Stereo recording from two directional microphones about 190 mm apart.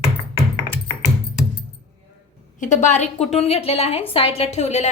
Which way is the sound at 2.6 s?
40° left (ahead or behind).